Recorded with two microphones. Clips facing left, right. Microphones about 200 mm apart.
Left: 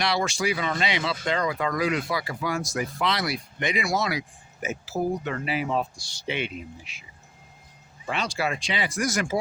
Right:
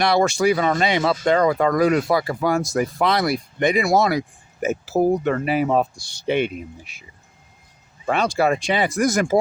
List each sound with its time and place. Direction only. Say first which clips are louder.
0.0 s speech: right 8 dB; 50° right (ahead or behind)
8.1 s speech: right 9 dB; 50° right (ahead or behind)